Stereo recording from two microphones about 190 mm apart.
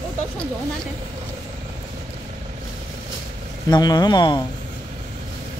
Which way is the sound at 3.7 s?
20° left (ahead or behind).